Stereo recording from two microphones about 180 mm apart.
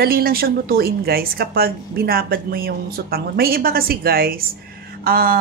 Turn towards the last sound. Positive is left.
turn(degrees=-55)  # may be behind; listen again after turning